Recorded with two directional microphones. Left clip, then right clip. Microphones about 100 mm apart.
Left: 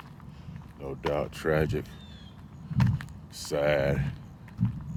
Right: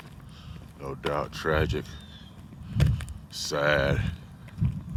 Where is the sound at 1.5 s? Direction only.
50° left (ahead or behind).